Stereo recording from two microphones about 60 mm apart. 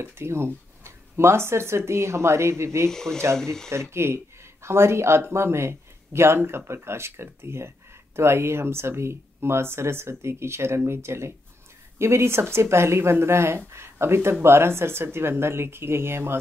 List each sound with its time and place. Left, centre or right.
0.0 s speech: right
2.9 s speech: centre
3.9 s speech: right